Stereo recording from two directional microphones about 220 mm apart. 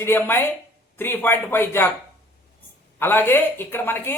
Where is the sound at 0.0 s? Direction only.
10° left (ahead or behind).